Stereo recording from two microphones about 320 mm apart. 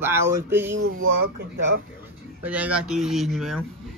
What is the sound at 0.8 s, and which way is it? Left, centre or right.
Speech, right.